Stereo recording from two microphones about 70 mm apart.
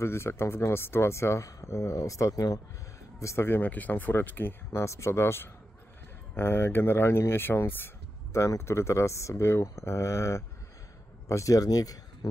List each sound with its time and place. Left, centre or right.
0.0 s speech: left
3.4 s speech: left
4.8 s speech: left
8.3 s speech: left